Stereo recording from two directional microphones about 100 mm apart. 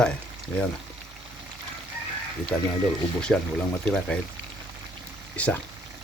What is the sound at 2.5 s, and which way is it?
Speech, 5° left (ahead or behind).